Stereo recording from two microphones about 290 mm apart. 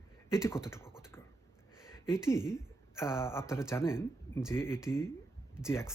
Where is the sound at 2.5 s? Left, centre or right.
Centre.